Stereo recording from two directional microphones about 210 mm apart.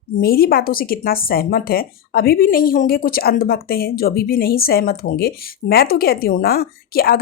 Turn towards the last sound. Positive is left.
turn(degrees=45)  # may be behind; listen again after turning